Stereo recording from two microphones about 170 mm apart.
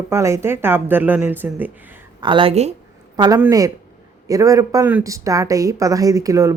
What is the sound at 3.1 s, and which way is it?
Speech, 25° right (ahead or behind).